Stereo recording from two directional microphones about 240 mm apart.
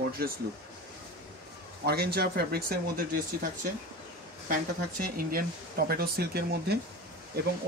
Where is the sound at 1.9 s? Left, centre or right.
Right.